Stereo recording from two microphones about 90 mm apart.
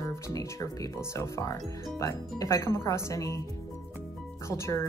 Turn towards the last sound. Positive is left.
turn(degrees=30)  # may be behind; listen again after turning